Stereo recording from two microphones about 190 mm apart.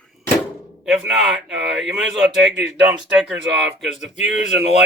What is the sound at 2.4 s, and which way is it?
Speech, 65° right (ahead or behind).